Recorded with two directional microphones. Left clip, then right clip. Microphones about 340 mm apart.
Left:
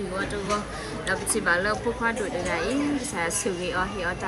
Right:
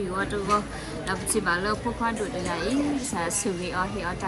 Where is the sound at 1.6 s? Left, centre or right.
Right.